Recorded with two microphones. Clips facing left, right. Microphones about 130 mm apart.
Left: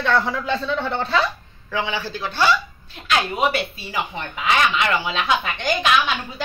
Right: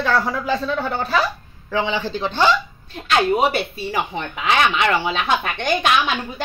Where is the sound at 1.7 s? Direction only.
15° right (ahead or behind).